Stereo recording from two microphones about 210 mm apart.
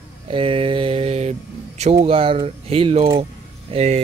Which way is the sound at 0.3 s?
25° right (ahead or behind).